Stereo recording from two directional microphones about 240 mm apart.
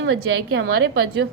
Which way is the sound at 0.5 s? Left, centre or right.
Right.